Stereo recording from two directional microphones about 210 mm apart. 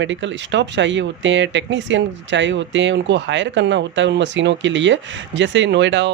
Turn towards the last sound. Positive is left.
turn(degrees=-55)  # may be behind; listen again after turning